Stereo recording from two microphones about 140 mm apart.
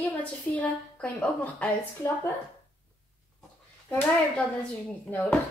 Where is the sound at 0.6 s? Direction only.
10° left (ahead or behind).